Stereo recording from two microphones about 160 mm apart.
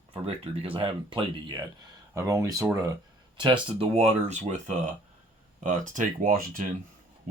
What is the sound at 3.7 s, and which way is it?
Speech, 40° right (ahead or behind).